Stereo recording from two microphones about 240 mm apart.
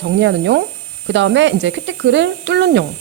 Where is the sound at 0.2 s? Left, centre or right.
Right.